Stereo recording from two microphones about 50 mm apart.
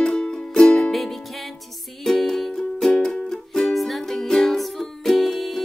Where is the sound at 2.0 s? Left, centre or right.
Centre.